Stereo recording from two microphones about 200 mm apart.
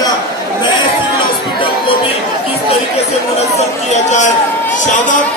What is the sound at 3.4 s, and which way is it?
Speech, 35° left (ahead or behind).